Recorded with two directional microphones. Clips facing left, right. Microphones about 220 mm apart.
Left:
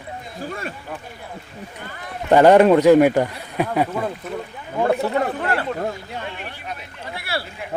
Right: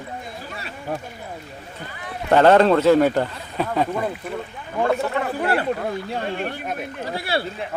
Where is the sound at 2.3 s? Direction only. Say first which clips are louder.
Left 2 dB; 15° left (ahead or behind).